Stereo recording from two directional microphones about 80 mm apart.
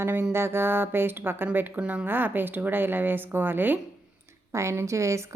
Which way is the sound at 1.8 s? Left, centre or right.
Centre.